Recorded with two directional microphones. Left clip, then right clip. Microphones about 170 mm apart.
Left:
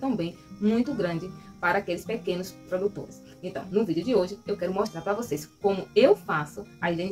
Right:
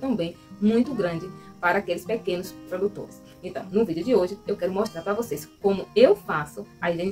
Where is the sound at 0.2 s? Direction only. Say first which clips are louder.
Right 3 dB; 20° right (ahead or behind).